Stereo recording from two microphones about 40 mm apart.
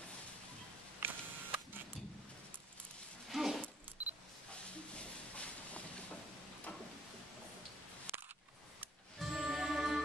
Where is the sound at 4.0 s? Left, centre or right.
Right.